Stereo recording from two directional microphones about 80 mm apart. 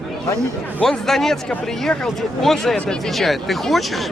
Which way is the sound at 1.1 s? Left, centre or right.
Centre.